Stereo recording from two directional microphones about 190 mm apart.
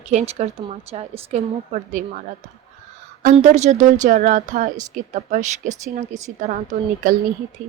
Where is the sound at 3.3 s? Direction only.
40° right (ahead or behind).